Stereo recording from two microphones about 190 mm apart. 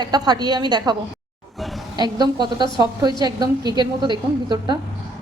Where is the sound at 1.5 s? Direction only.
Centre (ahead or behind).